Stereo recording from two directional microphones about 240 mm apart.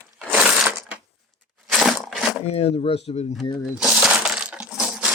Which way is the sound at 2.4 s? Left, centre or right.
Left.